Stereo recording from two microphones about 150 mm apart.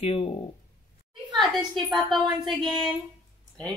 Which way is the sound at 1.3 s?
Centre (ahead or behind).